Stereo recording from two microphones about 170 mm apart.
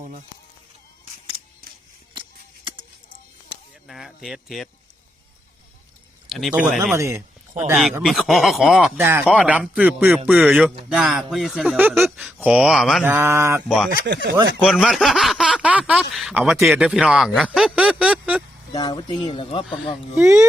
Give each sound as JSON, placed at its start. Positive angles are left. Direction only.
{"t": 3.8, "sound": "a sound", "side_deg": 0}
{"t": 6.2, "sound": "a sound", "side_deg": 0}
{"t": 6.6, "sound": "speech", "side_deg": -5}
{"t": 6.9, "sound": "speech", "side_deg": -15}
{"t": 8.0, "sound": "speech", "side_deg": 0}
{"t": 9.0, "sound": "speech", "side_deg": -15}
{"t": 13.1, "sound": "speech", "side_deg": -15}
{"t": 13.7, "sound": "speech", "side_deg": -5}
{"t": 18.7, "sound": "speech", "side_deg": 25}
{"t": 20.1, "sound": "speech", "side_deg": -10}